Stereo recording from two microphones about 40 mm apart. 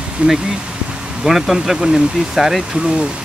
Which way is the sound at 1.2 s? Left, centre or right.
Centre.